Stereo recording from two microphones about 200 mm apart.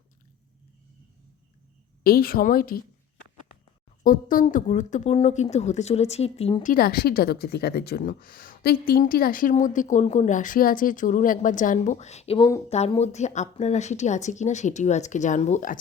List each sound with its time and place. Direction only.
2.0 s a woman's voice: 50° left (ahead or behind)
4.0 s speech: 40° left (ahead or behind)